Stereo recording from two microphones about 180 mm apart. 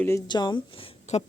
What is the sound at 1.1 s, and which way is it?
Speech, 40° left (ahead or behind).